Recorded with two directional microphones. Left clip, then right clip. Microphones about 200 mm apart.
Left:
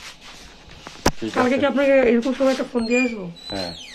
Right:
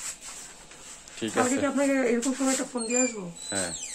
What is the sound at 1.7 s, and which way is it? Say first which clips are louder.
Speech: left 11 dB; 50° left (ahead or behind).